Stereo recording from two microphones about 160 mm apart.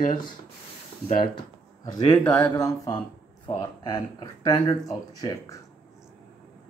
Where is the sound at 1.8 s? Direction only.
25° left (ahead or behind).